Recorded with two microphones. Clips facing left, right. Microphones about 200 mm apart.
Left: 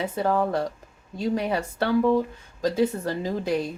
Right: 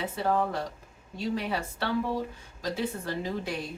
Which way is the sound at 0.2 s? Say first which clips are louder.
Left 4 dB; 45° left (ahead or behind).